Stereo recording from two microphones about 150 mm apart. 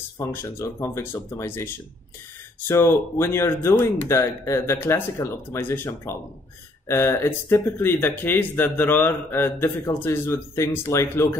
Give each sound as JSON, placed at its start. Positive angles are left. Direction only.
{"t": 0.2, "sound": "speech", "side_deg": 15}